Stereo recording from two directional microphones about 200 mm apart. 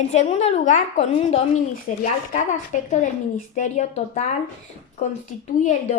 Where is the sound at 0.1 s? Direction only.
35° left (ahead or behind).